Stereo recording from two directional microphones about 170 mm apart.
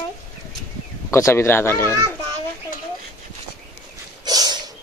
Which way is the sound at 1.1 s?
15° left (ahead or behind).